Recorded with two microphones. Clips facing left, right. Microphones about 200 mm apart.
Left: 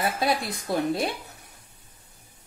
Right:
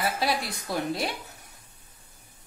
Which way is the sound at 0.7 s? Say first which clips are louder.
Left 4 dB; 25° left (ahead or behind).